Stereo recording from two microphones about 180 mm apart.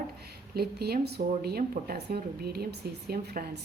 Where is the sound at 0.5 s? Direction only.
60° right (ahead or behind).